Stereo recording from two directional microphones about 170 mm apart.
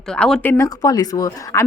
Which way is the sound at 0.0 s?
5° left (ahead or behind).